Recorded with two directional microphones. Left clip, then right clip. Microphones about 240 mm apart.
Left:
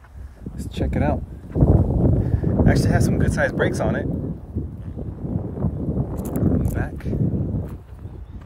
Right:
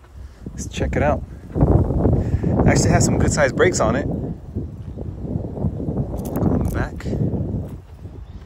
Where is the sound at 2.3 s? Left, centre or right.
Right.